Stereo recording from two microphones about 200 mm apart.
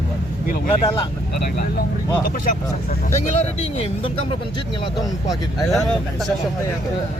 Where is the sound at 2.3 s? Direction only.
45° left (ahead or behind); by 4.2 s 30° left (ahead or behind).